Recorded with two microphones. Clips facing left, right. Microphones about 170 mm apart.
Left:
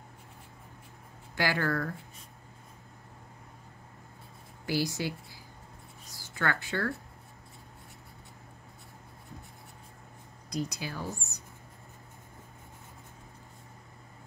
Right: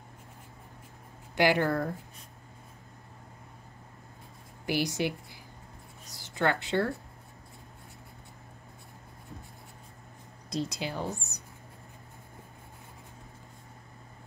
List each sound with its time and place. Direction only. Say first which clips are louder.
1.3 s speech: right 5 dB; 20° right (ahead or behind)
4.6 s speech: right 2 dB; 20° right (ahead or behind)
10.5 s speech: right 2 dB; 25° right (ahead or behind)